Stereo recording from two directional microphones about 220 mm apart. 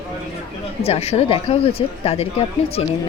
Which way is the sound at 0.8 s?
30° left (ahead or behind).